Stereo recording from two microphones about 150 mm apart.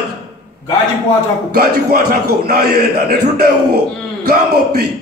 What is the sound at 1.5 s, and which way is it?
A man's voice, 90° right.